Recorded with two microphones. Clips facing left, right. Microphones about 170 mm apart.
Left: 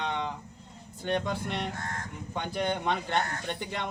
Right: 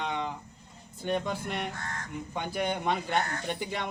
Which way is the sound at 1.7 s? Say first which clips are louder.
Left 2 dB; 50° left (ahead or behind).